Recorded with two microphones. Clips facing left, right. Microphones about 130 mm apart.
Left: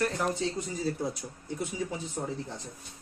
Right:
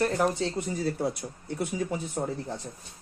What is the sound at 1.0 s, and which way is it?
Speech, 65° right (ahead or behind).